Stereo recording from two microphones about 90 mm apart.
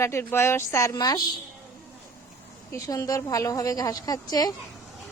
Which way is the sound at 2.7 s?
40° left (ahead or behind).